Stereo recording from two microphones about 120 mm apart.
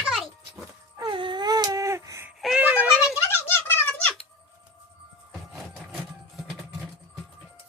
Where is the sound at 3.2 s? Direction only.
15° left (ahead or behind).